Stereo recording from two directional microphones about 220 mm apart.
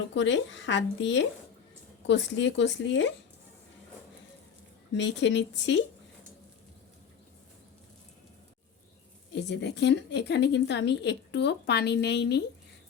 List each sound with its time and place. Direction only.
0.1 s speech: 55° left (ahead or behind)
4.9 s a woman's voice: 55° left (ahead or behind)
9.3 s a woman's voice: 50° left (ahead or behind)